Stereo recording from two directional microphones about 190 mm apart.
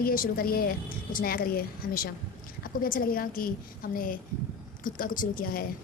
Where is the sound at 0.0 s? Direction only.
50° left (ahead or behind).